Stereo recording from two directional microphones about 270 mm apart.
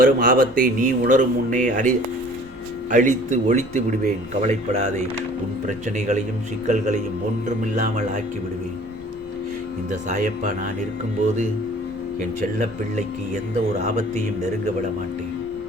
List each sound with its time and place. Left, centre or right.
0.0 s speech: right
2.9 s speech: right
9.9 s speech: right
12.5 s speech: right